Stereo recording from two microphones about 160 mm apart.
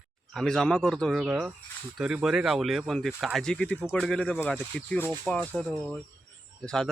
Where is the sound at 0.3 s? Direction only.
5° left (ahead or behind).